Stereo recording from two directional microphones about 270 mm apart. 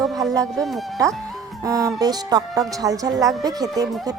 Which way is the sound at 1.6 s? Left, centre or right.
Centre.